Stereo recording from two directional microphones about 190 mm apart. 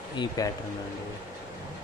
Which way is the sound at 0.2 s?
20° left (ahead or behind).